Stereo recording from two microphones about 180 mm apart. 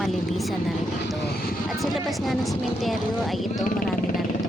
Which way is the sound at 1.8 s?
Centre (ahead or behind).